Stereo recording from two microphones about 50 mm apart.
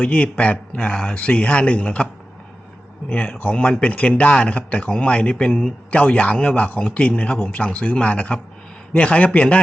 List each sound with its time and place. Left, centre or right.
0.0 s speech: left
3.1 s speech: left
5.9 s speech: left